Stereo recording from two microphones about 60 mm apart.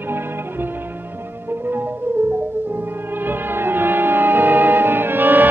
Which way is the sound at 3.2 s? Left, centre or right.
Right.